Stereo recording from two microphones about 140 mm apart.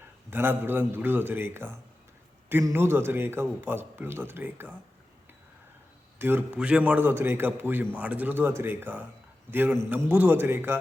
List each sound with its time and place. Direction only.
0.3 s a man's voice: 15° right (ahead or behind)
6.1 s a man's voice: 15° right (ahead or behind)